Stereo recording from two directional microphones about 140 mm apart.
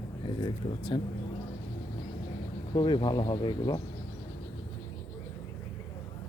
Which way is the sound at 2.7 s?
35° left (ahead or behind).